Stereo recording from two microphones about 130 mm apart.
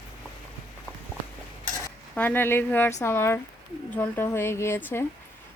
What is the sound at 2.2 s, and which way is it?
Speech, 15° left (ahead or behind).